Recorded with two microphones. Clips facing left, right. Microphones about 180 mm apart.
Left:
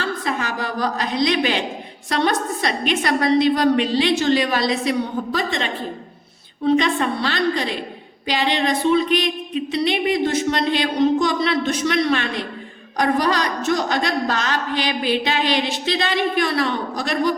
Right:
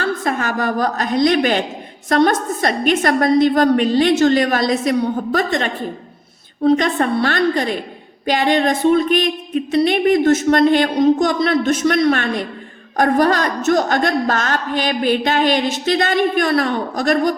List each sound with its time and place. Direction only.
0.0 s a woman's voice: 50° right (ahead or behind)